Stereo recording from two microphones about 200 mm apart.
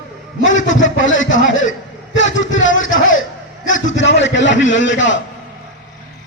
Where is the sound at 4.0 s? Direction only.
65° left (ahead or behind).